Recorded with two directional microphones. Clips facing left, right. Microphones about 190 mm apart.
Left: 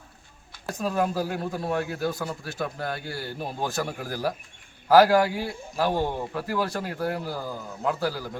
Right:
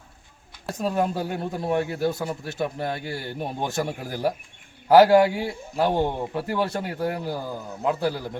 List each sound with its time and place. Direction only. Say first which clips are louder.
0.7 s a man's voice: right 2 dB; 25° right (ahead or behind)